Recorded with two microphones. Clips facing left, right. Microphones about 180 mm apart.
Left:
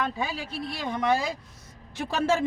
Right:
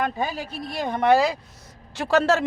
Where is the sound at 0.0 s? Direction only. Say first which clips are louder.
Right 4 dB; 45° right (ahead or behind).